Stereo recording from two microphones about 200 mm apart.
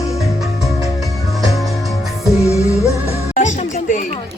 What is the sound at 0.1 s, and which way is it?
Music, 15° left (ahead or behind).